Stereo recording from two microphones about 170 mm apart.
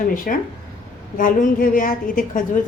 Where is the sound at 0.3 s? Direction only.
50° left (ahead or behind).